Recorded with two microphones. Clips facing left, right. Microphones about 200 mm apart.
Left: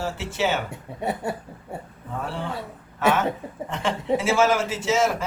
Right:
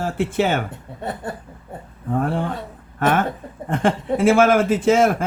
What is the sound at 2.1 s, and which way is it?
Speech, 50° right (ahead or behind).